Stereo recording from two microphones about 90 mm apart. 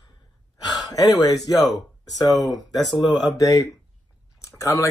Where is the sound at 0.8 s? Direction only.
45° left (ahead or behind).